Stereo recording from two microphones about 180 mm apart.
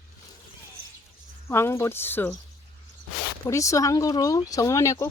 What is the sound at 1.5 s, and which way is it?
Speech, 15° left (ahead or behind).